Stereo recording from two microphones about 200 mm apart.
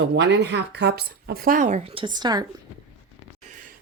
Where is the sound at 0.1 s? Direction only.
60° right (ahead or behind); by 2.5 s 20° right (ahead or behind).